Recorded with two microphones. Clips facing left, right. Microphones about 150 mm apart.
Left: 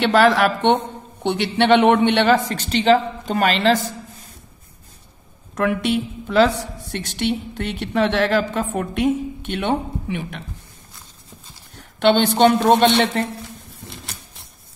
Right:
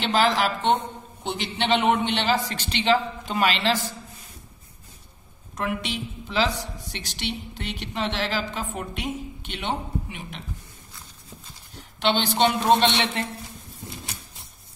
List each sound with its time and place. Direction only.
0.0 s a woman's voice: 55° left (ahead or behind)
5.6 s a woman's voice: 55° left (ahead or behind)
11.7 s a sound: 55° left (ahead or behind)
12.5 s a man's voice: 55° left (ahead or behind)